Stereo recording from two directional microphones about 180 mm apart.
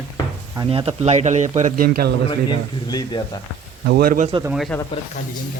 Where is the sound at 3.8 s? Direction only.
55° right (ahead or behind).